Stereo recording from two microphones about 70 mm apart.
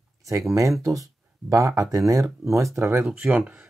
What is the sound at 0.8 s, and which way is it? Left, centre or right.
Speech, right.